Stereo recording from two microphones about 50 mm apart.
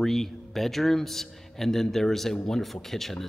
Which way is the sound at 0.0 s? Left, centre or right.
Centre.